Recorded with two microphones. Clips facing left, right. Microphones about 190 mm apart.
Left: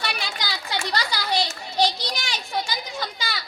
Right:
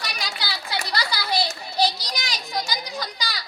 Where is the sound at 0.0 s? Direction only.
40° right (ahead or behind).